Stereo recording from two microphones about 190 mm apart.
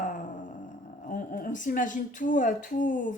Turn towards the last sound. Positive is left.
turn(degrees=45)  # may be behind; listen again after turning